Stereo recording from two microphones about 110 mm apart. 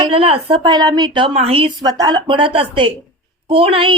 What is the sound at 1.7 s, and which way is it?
A woman's voice, 40° right (ahead or behind).